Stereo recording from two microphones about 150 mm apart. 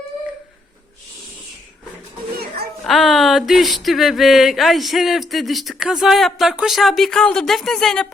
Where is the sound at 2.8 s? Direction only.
Centre (ahead or behind).